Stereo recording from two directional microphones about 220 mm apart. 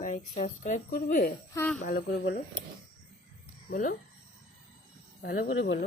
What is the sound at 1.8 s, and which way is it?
Speech, 40° left (ahead or behind).